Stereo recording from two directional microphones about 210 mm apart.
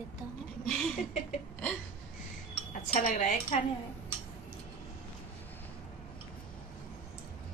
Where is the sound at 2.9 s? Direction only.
40° left (ahead or behind).